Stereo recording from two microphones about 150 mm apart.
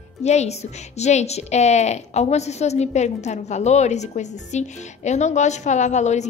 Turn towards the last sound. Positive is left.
turn(degrees=50)  # may be behind; listen again after turning